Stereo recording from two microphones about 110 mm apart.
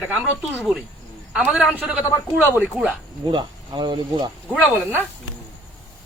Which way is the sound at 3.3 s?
45° right (ahead or behind).